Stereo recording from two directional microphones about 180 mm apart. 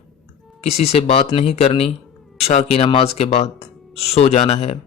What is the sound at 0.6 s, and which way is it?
Speech, 35° left (ahead or behind).